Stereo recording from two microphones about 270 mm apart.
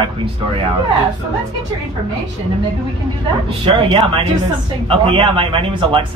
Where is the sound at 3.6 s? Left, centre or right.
Centre.